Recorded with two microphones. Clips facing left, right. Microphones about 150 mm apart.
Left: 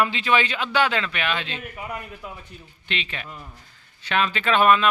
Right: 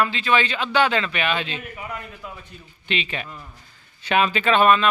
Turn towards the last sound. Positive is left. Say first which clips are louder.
# right 1 dB
turn(degrees=5)  # may be behind; listen again after turning